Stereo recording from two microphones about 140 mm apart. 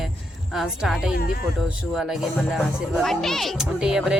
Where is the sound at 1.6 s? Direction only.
Centre (ahead or behind).